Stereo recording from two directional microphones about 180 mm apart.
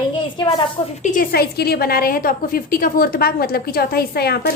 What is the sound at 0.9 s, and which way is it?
A woman's voice, 45° left (ahead or behind).